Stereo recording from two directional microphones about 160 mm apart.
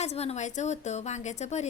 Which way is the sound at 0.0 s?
40° left (ahead or behind).